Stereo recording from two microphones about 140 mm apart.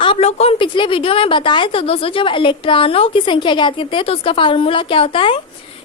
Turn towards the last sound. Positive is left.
turn(degrees=40)  # may be behind; listen again after turning